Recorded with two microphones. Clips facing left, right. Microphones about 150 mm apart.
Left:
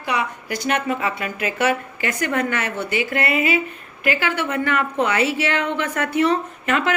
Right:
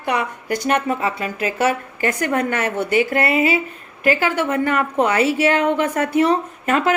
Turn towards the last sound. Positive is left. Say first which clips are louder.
# right 3 dB
turn(degrees=-35)  # may be behind; listen again after turning